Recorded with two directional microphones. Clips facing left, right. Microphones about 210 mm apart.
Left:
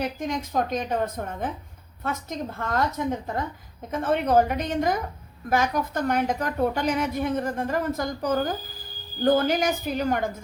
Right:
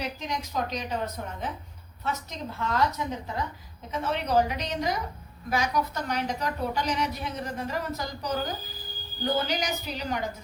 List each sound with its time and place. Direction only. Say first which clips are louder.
0.0 s a woman's voice: left 5 dB; 50° left (ahead or behind)